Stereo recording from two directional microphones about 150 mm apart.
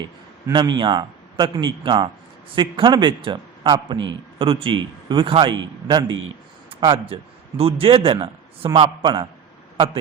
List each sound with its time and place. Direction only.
0.5 s a man's voice: 30° right (ahead or behind)